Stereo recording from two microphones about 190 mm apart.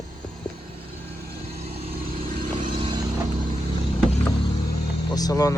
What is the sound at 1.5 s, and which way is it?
Vehicle, 30° right (ahead or behind).